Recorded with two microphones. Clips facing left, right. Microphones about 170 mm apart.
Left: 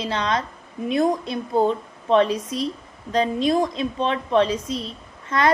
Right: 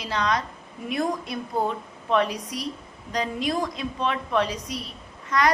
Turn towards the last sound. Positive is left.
turn(degrees=25)  # may be behind; listen again after turning